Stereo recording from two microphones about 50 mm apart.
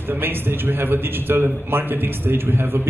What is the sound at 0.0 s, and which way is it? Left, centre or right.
A man's voice, right.